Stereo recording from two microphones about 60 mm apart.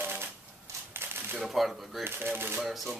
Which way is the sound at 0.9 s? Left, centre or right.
Right.